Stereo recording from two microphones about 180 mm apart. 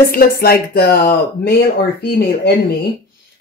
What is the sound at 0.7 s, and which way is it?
Speech, 55° left (ahead or behind).